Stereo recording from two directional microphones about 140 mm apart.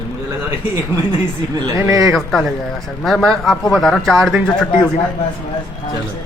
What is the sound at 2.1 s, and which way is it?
Speech, centre (ahead or behind).